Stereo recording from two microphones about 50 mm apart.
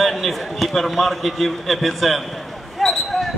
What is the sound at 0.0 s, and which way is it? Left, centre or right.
A man's voice, centre.